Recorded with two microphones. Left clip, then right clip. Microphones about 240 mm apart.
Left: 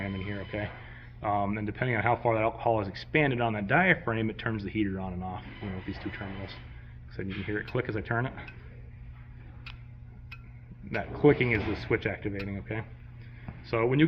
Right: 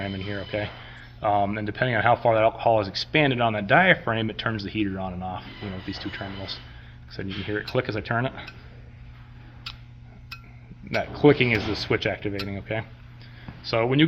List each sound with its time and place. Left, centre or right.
0.0 s radio: right
1.2 s speech: right
11.1 s speech: right